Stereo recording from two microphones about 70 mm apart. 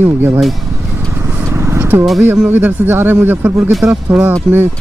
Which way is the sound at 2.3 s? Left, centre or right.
Right.